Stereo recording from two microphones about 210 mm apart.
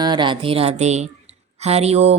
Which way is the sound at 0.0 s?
20° right (ahead or behind).